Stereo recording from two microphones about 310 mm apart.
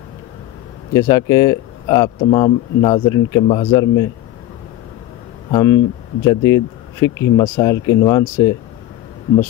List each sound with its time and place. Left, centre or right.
0.9 s speech: centre
5.5 s speech: centre